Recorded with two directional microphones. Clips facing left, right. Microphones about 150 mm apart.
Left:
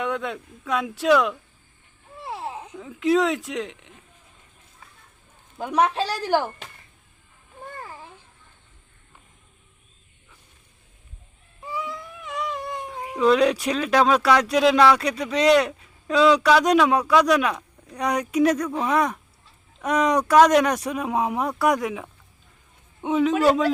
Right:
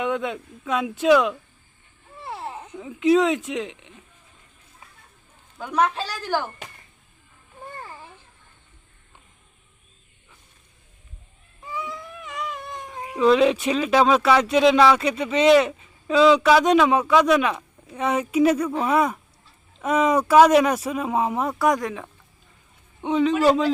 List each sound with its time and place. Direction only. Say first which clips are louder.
0.0 s speech: right 2 dB; 5° right (ahead or behind)
5.8 s a woman's voice: left 1 dB; 35° left (ahead or behind)
11.8 s humming: right 1 dB; 5° right (ahead or behind)
13.1 s a man's voice: right 1 dB; centre (ahead or behind)